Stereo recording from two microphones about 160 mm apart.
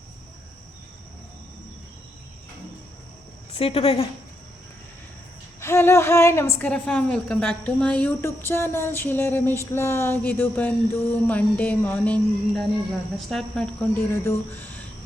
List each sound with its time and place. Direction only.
3.6 s a woman's voice: 40° left (ahead or behind)
5.5 s speech: 15° left (ahead or behind)
14.1 s speech: 15° left (ahead or behind)